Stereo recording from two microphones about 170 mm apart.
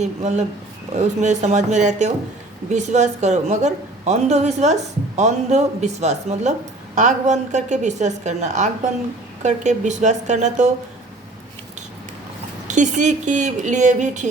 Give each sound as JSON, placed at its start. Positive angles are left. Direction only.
{"t": 0.0, "sound": "speech", "side_deg": -40}
{"t": 12.6, "sound": "speech", "side_deg": -45}